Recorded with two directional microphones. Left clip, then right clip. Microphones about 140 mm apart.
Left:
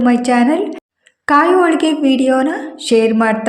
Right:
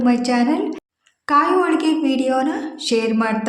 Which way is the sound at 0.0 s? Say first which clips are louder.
Left 5 dB; 30° left (ahead or behind).